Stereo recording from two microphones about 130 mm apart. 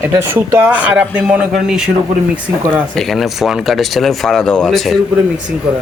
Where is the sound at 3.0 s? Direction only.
Centre (ahead or behind).